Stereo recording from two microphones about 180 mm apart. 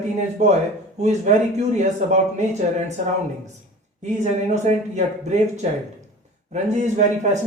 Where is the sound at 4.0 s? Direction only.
40° right (ahead or behind).